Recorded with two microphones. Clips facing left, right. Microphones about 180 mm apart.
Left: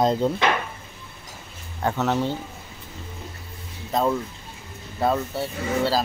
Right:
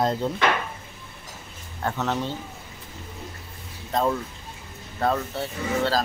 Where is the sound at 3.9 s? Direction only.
5° left (ahead or behind).